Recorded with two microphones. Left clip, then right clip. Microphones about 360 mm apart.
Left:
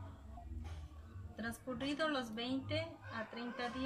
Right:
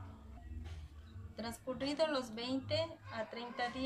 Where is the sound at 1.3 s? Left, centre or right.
Centre.